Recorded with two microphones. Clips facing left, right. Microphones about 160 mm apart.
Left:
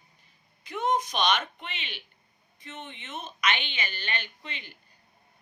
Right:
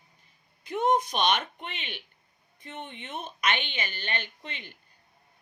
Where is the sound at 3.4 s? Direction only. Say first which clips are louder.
Even; 50° right (ahead or behind).